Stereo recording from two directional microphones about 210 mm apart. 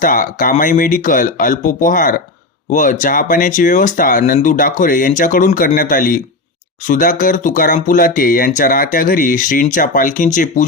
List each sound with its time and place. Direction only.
0.0 s speech: 40° left (ahead or behind)